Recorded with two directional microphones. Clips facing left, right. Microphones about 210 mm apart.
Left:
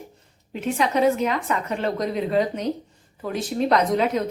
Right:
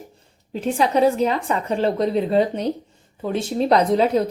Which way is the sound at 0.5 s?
30° right (ahead or behind).